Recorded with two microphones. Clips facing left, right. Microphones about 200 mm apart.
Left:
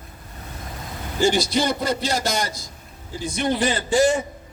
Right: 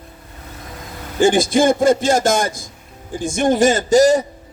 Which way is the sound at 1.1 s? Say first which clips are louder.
Right 6 dB; 50° right (ahead or behind).